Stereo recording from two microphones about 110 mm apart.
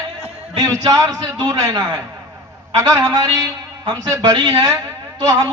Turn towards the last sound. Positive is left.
turn(degrees=-30)  # may be behind; listen again after turning